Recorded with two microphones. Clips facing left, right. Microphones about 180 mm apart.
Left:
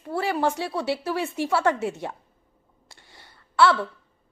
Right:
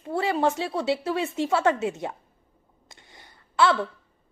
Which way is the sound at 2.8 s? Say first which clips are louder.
Right 1 dB; 20° right (ahead or behind).